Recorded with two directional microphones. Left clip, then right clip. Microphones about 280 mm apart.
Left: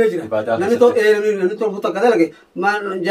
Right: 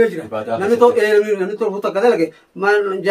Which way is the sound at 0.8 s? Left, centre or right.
Centre.